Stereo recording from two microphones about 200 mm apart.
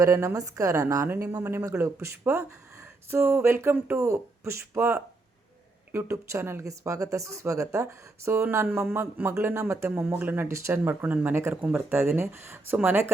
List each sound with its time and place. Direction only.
0.0 s speech: 15° right (ahead or behind)